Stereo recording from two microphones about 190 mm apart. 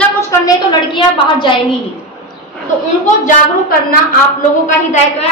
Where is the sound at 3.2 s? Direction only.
50° left (ahead or behind).